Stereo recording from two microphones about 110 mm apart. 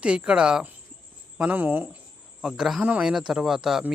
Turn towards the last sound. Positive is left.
turn(degrees=-5)  # may be behind; listen again after turning